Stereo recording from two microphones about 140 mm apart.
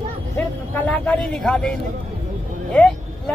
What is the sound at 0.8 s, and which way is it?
Speech, 10° left (ahead or behind).